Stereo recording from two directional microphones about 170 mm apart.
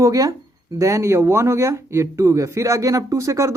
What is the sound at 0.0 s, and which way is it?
Speech, 20° right (ahead or behind).